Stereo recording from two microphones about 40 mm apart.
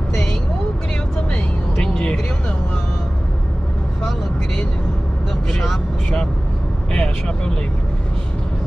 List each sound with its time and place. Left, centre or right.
1.1 s vehicle: centre
5.5 s vehicle: centre
6.9 s vehicle: left